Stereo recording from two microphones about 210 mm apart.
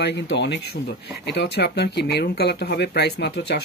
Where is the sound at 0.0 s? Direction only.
55° left (ahead or behind).